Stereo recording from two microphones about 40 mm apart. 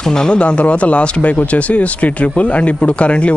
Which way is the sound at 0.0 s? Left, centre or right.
Centre.